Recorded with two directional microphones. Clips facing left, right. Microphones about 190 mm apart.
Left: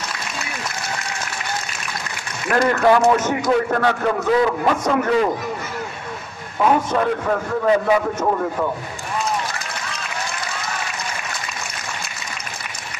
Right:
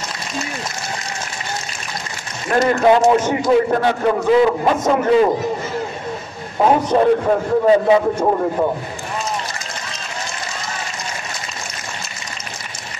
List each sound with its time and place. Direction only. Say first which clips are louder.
2.4 s a man's voice: right 2 dB; 25° right (ahead or behind)
6.6 s a man's voice: right 4 dB; 30° right (ahead or behind)